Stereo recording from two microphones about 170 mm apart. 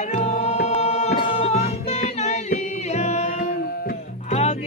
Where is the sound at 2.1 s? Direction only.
40° left (ahead or behind); by 4.0 s 55° left (ahead or behind).